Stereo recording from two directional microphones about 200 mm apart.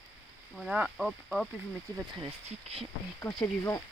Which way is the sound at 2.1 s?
30° right (ahead or behind).